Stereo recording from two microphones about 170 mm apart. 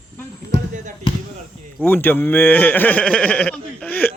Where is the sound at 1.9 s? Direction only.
10° left (ahead or behind).